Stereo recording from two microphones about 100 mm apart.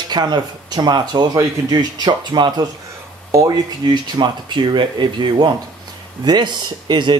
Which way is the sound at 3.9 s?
50° right (ahead or behind).